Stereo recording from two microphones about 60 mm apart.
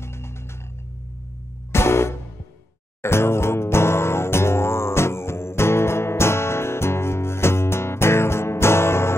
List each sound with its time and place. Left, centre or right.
0.0 s music: left
1.7 s music: left